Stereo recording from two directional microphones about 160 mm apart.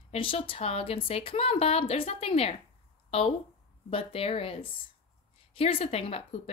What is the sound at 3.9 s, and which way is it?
A woman's voice, 35° left (ahead or behind).